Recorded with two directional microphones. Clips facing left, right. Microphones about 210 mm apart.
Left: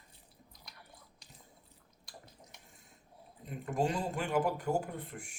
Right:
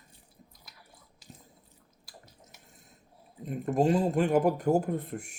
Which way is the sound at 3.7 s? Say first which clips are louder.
Right 8 dB; 40° right (ahead or behind).